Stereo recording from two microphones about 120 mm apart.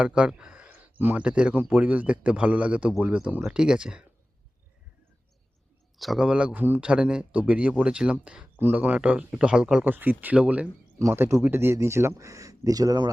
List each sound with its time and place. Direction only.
0.0 s a man's voice: 5° right (ahead or behind)
6.0 s a man's voice: centre (ahead or behind); by 13.1 s 30° right (ahead or behind)